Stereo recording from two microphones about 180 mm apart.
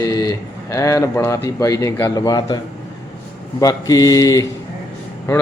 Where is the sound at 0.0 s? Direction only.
20° left (ahead or behind).